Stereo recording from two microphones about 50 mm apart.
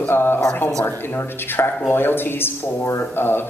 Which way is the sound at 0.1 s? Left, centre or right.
Left.